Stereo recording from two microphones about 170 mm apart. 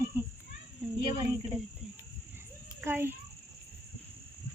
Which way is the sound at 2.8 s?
15° right (ahead or behind).